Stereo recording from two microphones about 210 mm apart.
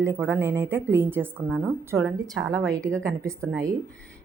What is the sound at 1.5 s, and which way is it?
Speech, centre (ahead or behind).